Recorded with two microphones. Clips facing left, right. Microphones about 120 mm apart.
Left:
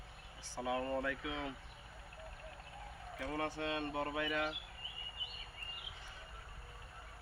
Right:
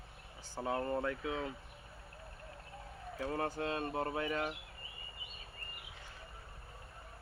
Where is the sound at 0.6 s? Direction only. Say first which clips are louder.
Right 2 dB; 35° right (ahead or behind).